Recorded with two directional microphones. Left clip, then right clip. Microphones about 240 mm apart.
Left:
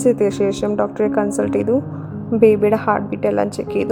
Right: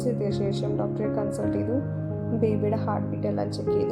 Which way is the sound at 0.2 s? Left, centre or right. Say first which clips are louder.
Left 11 dB; left.